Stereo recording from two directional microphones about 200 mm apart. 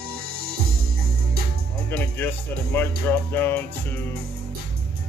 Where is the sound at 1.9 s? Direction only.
10° left (ahead or behind).